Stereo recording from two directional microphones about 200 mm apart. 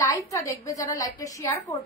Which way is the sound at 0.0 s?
15° left (ahead or behind).